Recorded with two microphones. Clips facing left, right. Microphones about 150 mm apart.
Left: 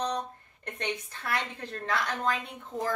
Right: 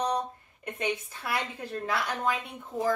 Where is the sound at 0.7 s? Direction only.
10° right (ahead or behind).